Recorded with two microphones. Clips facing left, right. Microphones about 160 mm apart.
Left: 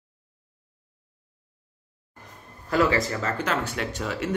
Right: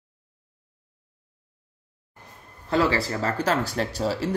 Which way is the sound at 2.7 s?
30° right (ahead or behind).